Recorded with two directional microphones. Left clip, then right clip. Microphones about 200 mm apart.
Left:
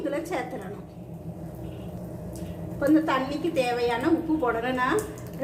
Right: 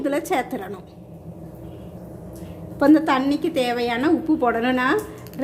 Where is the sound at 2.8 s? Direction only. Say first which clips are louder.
Right 6 dB; 60° right (ahead or behind).